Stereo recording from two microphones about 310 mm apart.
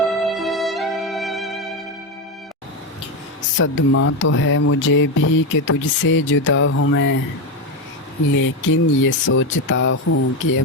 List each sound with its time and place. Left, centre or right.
0.0 s music: centre
3.6 s speech: left
8.4 s speech: left